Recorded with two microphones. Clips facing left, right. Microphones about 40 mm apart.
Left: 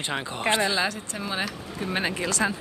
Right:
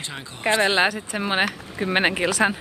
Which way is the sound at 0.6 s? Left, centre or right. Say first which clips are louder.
Right 5 dB; right.